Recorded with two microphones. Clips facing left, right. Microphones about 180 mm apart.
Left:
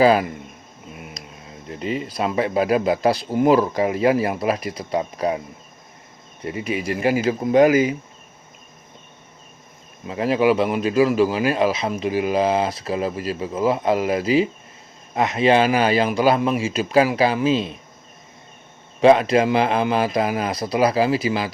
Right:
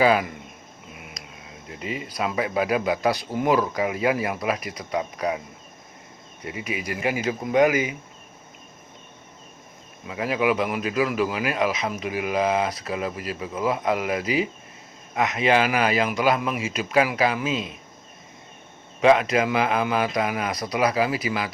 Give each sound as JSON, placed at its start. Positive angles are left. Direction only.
{"t": 0.0, "sound": "speech", "side_deg": 35}
{"t": 1.8, "sound": "speech", "side_deg": 35}
{"t": 6.4, "sound": "speech", "side_deg": 35}
{"t": 10.1, "sound": "speech", "side_deg": 35}
{"t": 19.0, "sound": "speech", "side_deg": 30}